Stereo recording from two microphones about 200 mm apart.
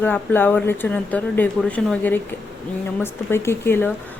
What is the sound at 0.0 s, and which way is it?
Speech, 10° left (ahead or behind).